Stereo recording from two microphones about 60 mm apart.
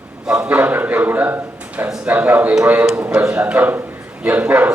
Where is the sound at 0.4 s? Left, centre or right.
Right.